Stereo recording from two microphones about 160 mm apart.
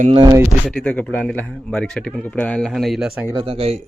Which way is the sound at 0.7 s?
5° left (ahead or behind).